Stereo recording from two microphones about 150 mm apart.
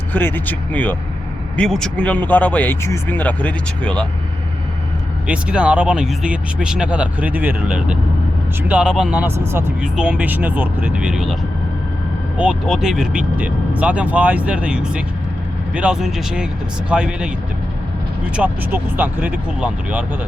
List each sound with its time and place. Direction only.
0.1 s speech: 15° left (ahead or behind)
5.3 s speech: 5° right (ahead or behind)
9.8 s speech: 5° right (ahead or behind)
12.4 s speech: 5° right (ahead or behind)
18.3 s speech: 10° right (ahead or behind)